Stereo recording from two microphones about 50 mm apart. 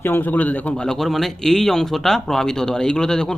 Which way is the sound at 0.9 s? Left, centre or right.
Centre.